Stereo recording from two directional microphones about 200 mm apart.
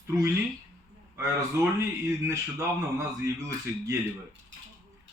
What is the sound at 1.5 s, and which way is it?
Speech, 15° right (ahead or behind).